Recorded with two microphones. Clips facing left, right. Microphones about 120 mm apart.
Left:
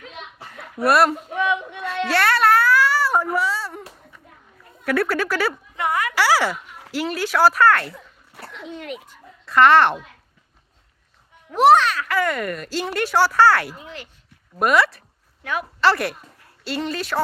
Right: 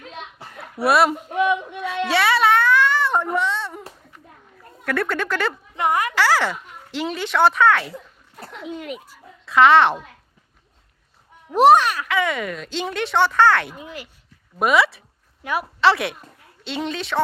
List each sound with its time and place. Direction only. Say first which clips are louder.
0.8 s speech: even; centre (ahead or behind)
2.0 s a sound: even; centre (ahead or behind)
4.9 s speech: left 2 dB; 5° left (ahead or behind)
5.7 s a sound: right 6 dB; 20° right (ahead or behind)
6.1 s speech: even; 10° left (ahead or behind)
11.5 s speech: right 1 dB; 15° right (ahead or behind)
12.0 s speech: even; centre (ahead or behind)
13.7 s speech: right 2 dB; 10° right (ahead or behind)
14.6 s a woman's voice: even; centre (ahead or behind)